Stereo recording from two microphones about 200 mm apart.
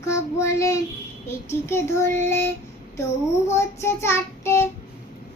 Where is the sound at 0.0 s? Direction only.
15° left (ahead or behind).